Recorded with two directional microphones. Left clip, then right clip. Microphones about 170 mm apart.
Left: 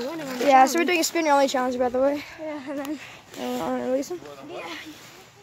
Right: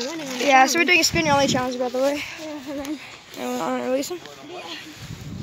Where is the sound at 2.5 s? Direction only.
10° right (ahead or behind).